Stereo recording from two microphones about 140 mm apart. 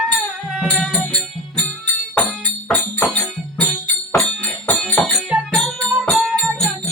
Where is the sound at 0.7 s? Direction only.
5° left (ahead or behind).